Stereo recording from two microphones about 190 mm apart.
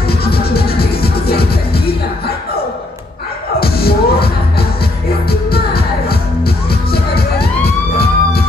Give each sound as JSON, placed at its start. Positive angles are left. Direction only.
{"t": 0.1, "sound": "music", "side_deg": 55}
{"t": 3.5, "sound": "music", "side_deg": 55}